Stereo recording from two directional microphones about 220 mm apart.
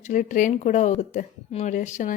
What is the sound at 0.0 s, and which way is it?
Speech, 35° left (ahead or behind).